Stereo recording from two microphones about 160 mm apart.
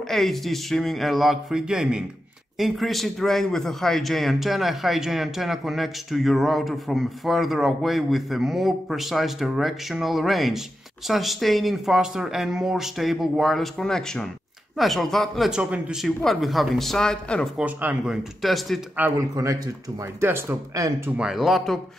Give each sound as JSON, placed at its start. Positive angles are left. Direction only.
{"t": 0.1, "sound": "a man's voice", "side_deg": 0}
{"t": 17.6, "sound": "a man's voice", "side_deg": -10}
{"t": 18.9, "sound": "speech", "side_deg": -15}
{"t": 21.2, "sound": "a man's voice", "side_deg": -5}